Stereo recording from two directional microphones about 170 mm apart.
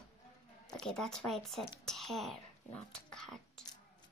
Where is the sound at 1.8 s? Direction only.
Centre (ahead or behind).